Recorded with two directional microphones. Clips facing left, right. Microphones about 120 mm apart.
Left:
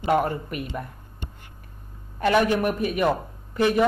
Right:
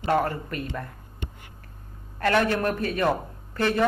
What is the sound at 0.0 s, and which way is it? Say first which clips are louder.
Speech: left 2 dB; 15° left (ahead or behind).